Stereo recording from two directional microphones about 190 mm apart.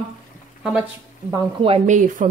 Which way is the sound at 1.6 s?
30° right (ahead or behind).